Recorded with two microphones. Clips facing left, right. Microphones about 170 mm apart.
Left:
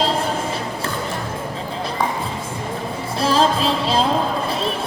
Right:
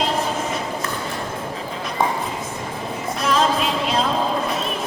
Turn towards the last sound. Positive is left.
turn(degrees=30)  # may be behind; listen again after turning